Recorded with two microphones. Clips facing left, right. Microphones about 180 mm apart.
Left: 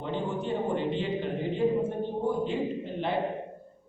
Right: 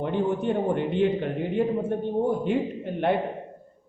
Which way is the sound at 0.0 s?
60° right (ahead or behind).